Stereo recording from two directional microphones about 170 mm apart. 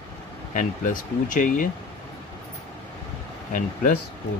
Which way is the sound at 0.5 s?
50° left (ahead or behind).